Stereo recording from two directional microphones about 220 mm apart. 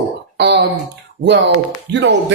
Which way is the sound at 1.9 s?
50° right (ahead or behind).